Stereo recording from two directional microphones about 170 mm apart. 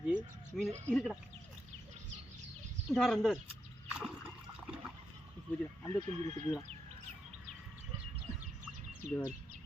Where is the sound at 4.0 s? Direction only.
5° right (ahead or behind).